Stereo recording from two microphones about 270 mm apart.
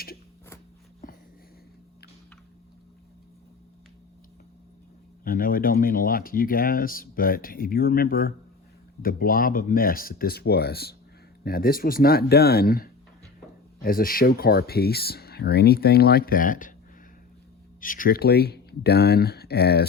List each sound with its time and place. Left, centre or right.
1.0 s a sound: left
5.2 s speech: left
17.7 s speech: left